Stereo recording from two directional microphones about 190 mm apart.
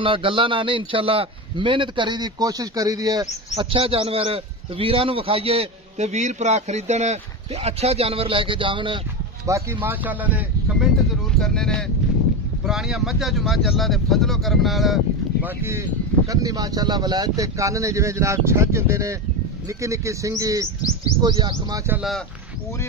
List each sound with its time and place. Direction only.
0.0 s a man's voice: 25° right (ahead or behind)
3.5 s a man's voice: 30° right (ahead or behind)
9.5 s speech: 10° right (ahead or behind)
11.3 s speech: 5° left (ahead or behind)
15.4 s a man's voice: 15° right (ahead or behind)